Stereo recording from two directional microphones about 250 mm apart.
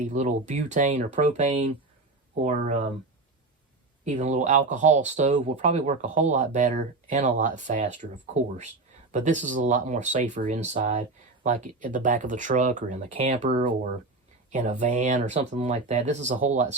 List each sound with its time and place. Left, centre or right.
0.1 s speech: right
4.0 s speech: right